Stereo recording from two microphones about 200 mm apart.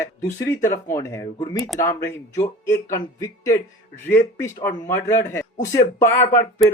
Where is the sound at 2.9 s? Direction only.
15° left (ahead or behind).